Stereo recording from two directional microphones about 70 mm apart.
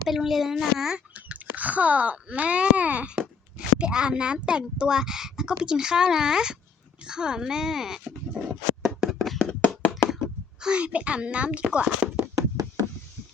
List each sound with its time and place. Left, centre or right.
0.1 s speech: centre
1.1 s speech: right
9.1 s hands: centre
10.6 s speech: centre
12.4 s a sound: right